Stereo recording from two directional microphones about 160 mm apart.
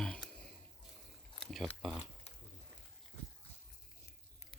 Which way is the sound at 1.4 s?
Centre (ahead or behind).